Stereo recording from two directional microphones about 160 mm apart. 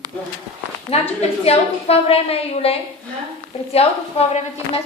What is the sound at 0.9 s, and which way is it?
Speech, 40° left (ahead or behind).